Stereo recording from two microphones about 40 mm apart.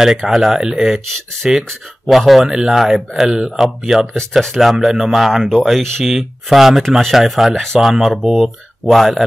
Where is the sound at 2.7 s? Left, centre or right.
Centre.